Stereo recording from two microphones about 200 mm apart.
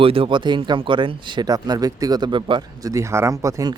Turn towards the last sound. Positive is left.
turn(degrees=-15)  # may be behind; listen again after turning